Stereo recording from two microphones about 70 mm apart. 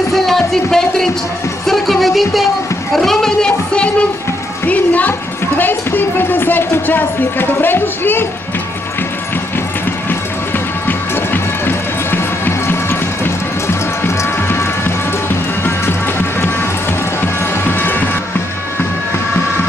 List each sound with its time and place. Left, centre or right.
0.1 s music: centre
2.9 s a woman's voice: centre; by 8.3 s left
10.9 s music: left